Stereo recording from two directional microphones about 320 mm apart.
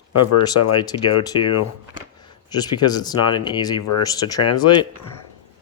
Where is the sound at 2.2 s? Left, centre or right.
Centre.